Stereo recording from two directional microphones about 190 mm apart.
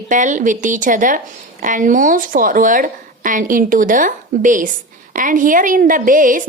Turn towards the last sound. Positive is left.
turn(degrees=-45)  # may be behind; listen again after turning